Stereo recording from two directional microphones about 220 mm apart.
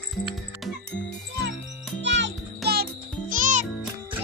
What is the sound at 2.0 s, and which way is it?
Music, 55° right (ahead or behind).